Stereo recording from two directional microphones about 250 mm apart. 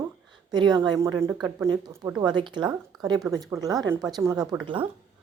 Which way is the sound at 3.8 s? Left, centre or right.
Centre.